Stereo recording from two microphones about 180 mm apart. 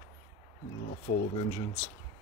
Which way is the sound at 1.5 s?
40° left (ahead or behind).